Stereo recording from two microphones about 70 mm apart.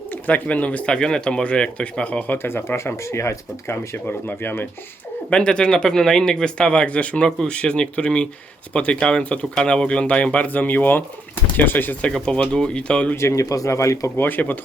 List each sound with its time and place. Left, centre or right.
0.1 s speech: left
2.5 s speech: left
5.3 s speech: centre
12.1 s speech: centre
13.1 s speech: left
14.2 s speech: left